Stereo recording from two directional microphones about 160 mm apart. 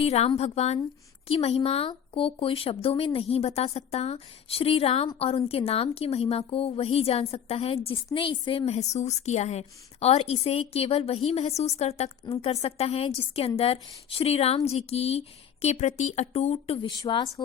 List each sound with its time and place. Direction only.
0.0 s a woman's voice: 40° left (ahead or behind)
17.0 s a woman's voice: 25° left (ahead or behind)